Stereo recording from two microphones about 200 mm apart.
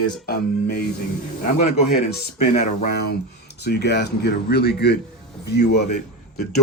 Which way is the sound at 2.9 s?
55° left (ahead or behind).